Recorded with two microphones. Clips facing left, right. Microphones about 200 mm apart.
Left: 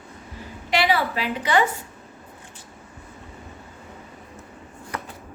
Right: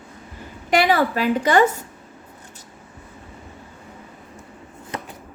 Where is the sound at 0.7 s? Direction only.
45° right (ahead or behind).